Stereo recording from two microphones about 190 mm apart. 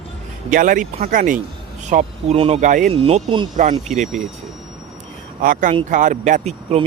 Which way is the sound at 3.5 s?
40° right (ahead or behind).